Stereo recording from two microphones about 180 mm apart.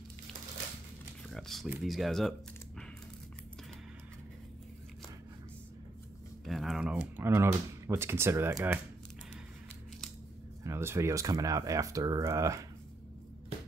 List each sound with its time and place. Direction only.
1.3 s a sound: centre (ahead or behind)
1.7 s speech: centre (ahead or behind)
6.4 s speech: centre (ahead or behind)
10.6 s speech: 15° right (ahead or behind)